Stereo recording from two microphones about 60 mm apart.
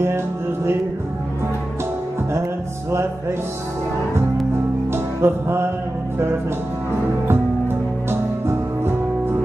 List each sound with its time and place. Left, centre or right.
4.9 s music: right
7.2 s music: right